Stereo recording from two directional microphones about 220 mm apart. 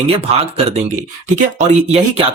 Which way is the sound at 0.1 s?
25° right (ahead or behind).